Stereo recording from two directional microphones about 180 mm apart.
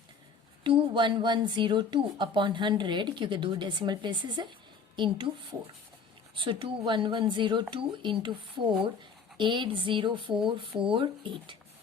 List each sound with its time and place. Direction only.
0.6 s a woman's voice: 30° right (ahead or behind)